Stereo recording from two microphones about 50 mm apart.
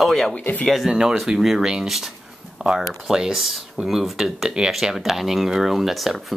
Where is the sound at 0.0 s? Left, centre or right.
Centre.